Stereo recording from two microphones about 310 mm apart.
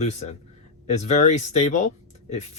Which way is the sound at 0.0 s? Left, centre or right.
Left.